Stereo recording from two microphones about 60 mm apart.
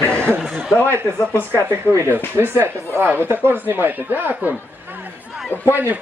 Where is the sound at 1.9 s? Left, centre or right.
Right.